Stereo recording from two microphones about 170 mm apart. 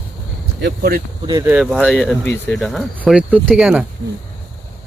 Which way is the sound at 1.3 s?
15° right (ahead or behind).